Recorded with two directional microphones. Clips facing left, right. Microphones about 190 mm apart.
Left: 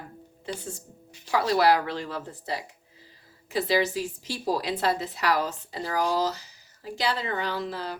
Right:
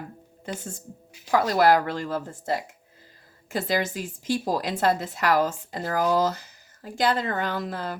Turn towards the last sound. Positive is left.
turn(degrees=-50)  # may be behind; listen again after turning